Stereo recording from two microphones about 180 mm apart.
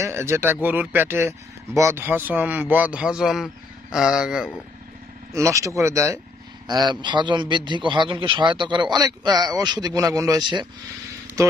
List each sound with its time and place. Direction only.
0.0 s speech: 15° right (ahead or behind)
5.3 s a man's voice: 15° right (ahead or behind)